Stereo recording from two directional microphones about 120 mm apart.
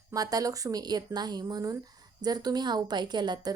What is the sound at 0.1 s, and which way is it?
A woman's voice, 30° right (ahead or behind).